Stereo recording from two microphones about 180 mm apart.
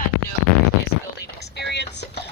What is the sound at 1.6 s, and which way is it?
Vehicle, 70° left (ahead or behind).